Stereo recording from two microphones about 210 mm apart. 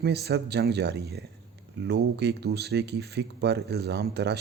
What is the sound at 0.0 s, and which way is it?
Speech, 50° right (ahead or behind).